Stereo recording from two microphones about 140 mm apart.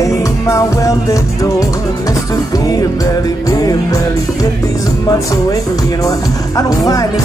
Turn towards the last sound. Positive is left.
turn(degrees=25)  # may be behind; listen again after turning